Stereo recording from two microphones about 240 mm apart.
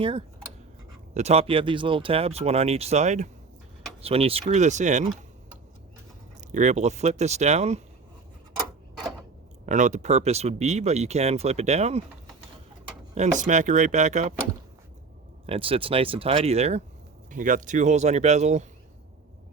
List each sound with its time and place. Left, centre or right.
0.0 s speech: right
6.5 s speech: right
9.6 s speech: right
13.1 s speech: right
15.4 s speech: right